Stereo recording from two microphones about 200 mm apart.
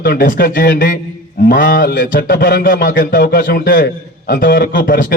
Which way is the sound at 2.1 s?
60° left (ahead or behind).